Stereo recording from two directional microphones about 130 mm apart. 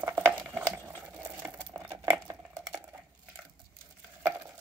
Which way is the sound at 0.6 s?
20° right (ahead or behind).